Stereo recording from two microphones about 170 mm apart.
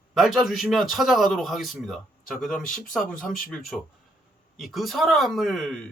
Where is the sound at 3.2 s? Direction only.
55° left (ahead or behind).